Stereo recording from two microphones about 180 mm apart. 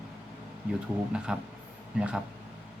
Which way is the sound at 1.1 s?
5° right (ahead or behind).